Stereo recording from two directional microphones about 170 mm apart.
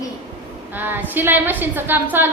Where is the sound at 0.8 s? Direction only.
10° right (ahead or behind).